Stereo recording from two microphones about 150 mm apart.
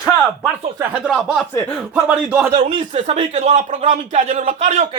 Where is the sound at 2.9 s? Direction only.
50° right (ahead or behind).